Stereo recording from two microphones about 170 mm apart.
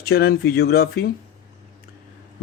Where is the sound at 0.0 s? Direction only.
65° left (ahead or behind).